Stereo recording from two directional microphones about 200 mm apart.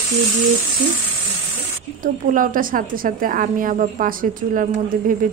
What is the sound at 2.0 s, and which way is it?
A woman's voice, 40° right (ahead or behind).